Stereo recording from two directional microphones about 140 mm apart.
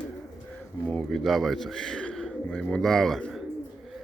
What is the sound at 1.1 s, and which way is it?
Speech, centre (ahead or behind).